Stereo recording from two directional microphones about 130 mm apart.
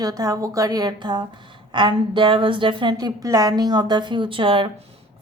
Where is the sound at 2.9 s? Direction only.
25° right (ahead or behind).